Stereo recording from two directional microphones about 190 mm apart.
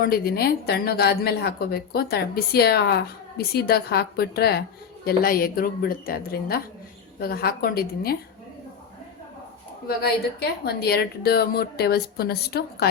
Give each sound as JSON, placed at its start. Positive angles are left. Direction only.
{"t": 0.0, "sound": "a woman's voice", "side_deg": 50}
{"t": 9.8, "sound": "a woman's voice", "side_deg": 55}